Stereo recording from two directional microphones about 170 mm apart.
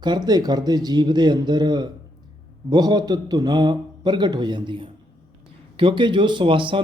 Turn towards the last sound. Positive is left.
turn(degrees=-30)  # may be behind; listen again after turning